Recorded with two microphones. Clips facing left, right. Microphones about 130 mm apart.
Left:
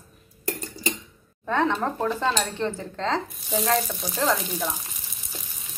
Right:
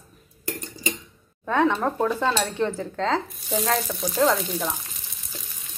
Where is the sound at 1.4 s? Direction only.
15° right (ahead or behind).